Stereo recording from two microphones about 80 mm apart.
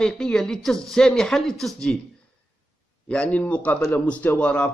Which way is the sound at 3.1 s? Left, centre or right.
Centre.